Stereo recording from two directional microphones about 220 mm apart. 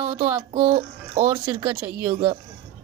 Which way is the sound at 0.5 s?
25° right (ahead or behind).